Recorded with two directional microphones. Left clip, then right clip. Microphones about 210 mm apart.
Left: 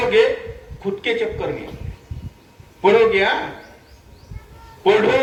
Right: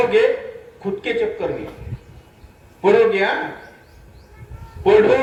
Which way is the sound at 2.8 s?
30° right (ahead or behind).